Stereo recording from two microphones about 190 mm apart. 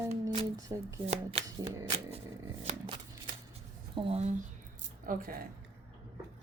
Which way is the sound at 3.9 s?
35° right (ahead or behind).